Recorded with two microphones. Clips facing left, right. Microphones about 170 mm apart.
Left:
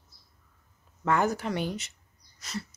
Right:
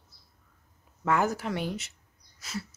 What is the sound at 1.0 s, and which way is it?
Speech, 5° right (ahead or behind).